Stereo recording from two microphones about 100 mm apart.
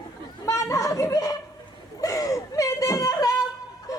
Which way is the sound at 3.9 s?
35° left (ahead or behind).